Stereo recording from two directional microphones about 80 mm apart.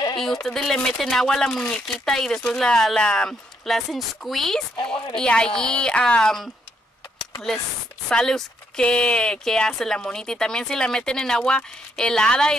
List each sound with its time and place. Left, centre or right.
0.2 s speech: centre
8.1 s speech: centre